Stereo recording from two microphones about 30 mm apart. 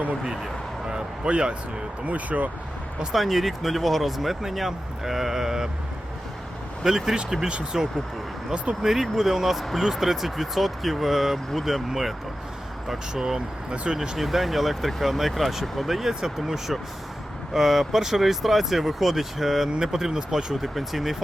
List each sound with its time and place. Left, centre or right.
0.9 s speech: right
2.0 s speech: right
3.2 s speech: centre
6.8 s speech: centre
7.4 s speech: right
8.8 s speech: centre
12.9 s speech: centre
14.2 s speech: centre
15.6 s speech: centre
15.9 s speech: centre
20.6 s speech: centre